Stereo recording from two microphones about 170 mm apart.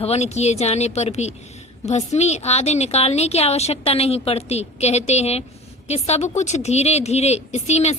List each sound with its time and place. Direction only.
0.0 s a woman's voice: 40° left (ahead or behind)